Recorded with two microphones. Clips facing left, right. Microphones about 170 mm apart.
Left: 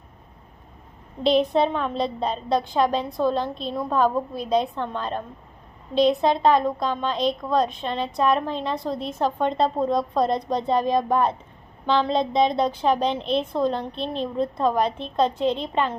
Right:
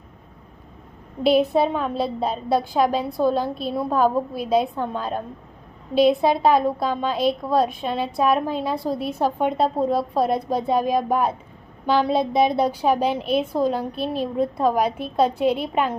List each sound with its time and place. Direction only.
1.2 s a woman's voice: 5° right (ahead or behind)